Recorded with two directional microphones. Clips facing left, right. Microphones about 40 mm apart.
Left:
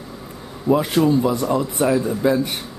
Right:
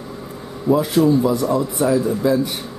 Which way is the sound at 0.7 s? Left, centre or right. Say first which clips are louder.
Right 2 dB; left.